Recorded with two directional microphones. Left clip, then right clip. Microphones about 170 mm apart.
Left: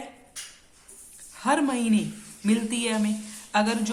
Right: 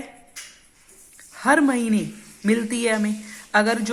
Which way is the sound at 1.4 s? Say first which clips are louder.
Right 6 dB; 40° right (ahead or behind).